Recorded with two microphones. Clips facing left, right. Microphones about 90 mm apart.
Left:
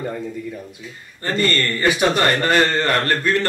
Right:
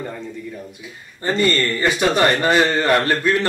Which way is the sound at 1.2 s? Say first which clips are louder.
Right 2 dB; 15° right (ahead or behind).